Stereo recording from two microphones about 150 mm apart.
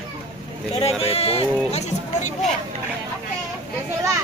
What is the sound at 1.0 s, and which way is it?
Speech, 40° left (ahead or behind).